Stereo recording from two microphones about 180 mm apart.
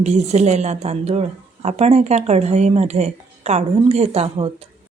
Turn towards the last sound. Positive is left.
turn(degrees=-35)  # may be behind; listen again after turning